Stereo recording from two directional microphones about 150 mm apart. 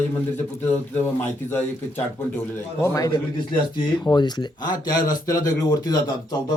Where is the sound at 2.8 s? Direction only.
20° left (ahead or behind).